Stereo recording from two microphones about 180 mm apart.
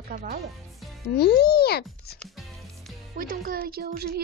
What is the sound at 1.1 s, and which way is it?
Speech, 60° left (ahead or behind).